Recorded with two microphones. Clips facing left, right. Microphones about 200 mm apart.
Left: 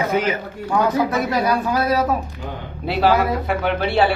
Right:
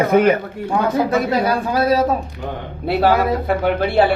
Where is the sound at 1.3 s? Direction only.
25° right (ahead or behind).